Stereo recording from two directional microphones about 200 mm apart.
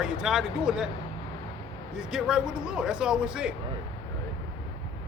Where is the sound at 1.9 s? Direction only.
5° right (ahead or behind).